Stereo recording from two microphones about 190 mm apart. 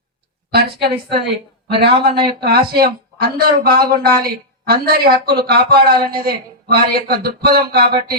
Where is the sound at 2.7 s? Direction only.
55° right (ahead or behind).